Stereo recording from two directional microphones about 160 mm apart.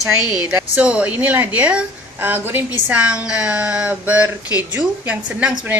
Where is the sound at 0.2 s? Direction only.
5° right (ahead or behind).